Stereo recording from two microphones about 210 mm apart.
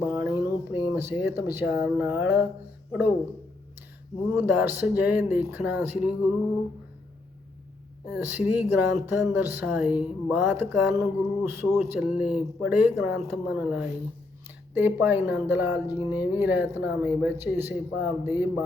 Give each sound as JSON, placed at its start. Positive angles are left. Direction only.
{"t": 0.0, "sound": "a sound", "side_deg": -10}
{"t": 0.7, "sound": "speech", "side_deg": -10}
{"t": 4.4, "sound": "speech", "side_deg": -10}
{"t": 8.1, "sound": "speech", "side_deg": -10}